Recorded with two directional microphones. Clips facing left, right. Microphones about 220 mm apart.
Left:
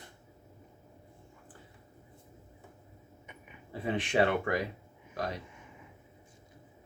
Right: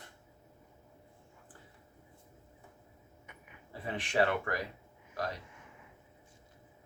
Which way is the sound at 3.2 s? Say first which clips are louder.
Left 4 dB; 20° left (ahead or behind).